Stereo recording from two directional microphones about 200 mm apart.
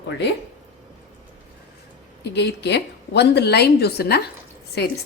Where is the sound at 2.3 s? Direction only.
60° left (ahead or behind).